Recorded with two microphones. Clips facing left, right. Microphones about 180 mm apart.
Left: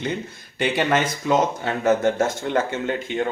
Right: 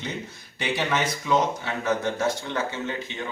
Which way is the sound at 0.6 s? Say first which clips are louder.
Left 5 dB; 55° left (ahead or behind).